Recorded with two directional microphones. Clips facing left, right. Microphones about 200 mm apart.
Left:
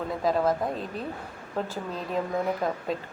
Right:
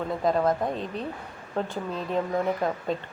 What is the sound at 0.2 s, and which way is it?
Speech, centre (ahead or behind).